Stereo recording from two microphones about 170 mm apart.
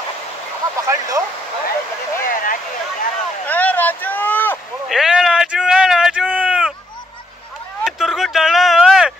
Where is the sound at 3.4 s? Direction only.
10° left (ahead or behind).